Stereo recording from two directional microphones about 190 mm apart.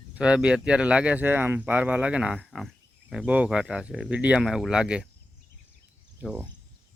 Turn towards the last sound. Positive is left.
turn(degrees=-10)  # may be behind; listen again after turning